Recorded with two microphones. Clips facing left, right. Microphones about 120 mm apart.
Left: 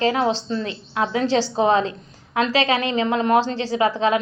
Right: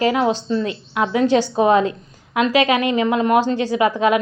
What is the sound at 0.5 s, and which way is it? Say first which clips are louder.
A woman's voice: right 4 dB; 30° left (ahead or behind).